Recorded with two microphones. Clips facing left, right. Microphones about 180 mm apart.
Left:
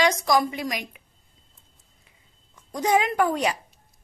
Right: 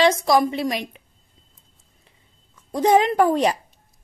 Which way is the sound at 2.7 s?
30° right (ahead or behind).